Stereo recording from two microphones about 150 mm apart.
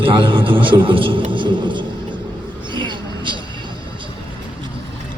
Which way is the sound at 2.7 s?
30° right (ahead or behind).